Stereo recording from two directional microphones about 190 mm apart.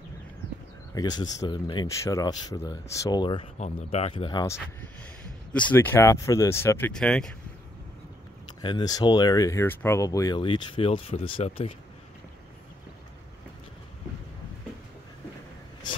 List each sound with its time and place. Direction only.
0.9 s speech: 20° left (ahead or behind)
3.5 s speech: 35° left (ahead or behind)
5.5 s speech: 5° left (ahead or behind)
8.5 s speech: 20° left (ahead or behind)